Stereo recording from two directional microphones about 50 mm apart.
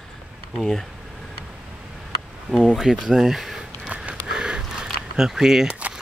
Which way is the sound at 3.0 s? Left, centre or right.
Centre.